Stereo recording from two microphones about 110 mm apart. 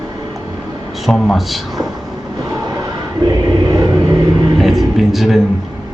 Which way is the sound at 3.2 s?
35° right (ahead or behind).